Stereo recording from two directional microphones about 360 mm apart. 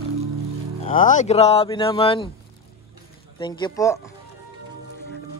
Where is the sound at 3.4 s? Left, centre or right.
Centre.